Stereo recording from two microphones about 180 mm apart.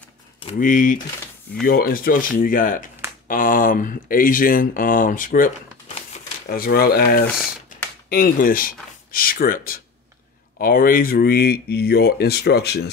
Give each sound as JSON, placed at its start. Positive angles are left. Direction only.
{"t": 0.6, "sound": "speech", "side_deg": 50}